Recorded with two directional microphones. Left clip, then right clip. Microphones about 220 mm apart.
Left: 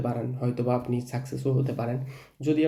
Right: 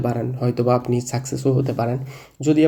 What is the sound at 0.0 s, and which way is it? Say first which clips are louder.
Speech: right 7 dB; 30° right (ahead or behind).